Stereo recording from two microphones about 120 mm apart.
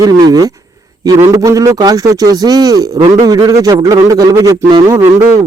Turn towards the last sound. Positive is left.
turn(degrees=-20)  # may be behind; listen again after turning